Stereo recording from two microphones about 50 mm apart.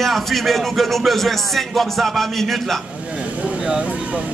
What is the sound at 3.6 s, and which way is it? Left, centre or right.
Speech, centre.